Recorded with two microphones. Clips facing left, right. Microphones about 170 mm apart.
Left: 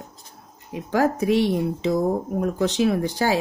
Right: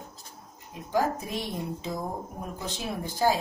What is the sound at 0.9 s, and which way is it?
Speech, 75° left (ahead or behind).